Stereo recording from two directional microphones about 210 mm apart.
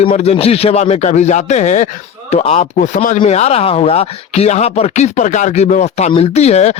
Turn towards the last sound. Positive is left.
turn(degrees=30)  # may be behind; listen again after turning